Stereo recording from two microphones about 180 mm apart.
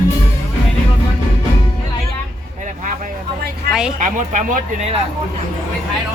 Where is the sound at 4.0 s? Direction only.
45° right (ahead or behind).